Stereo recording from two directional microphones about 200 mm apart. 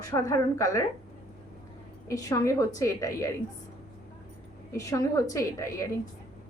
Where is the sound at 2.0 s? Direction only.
15° left (ahead or behind).